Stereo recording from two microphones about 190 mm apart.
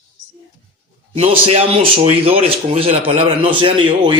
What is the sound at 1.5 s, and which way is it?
Speech, 30° right (ahead or behind).